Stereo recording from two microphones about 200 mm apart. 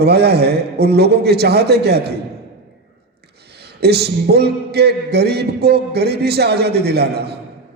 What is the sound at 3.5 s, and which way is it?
A man's voice, 55° right (ahead or behind).